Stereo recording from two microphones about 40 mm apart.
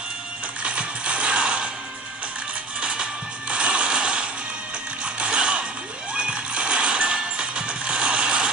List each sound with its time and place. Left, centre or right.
0.6 s mechanisms: right
2.8 s music: right